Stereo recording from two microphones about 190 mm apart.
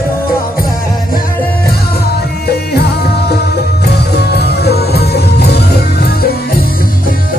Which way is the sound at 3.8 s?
60° left (ahead or behind).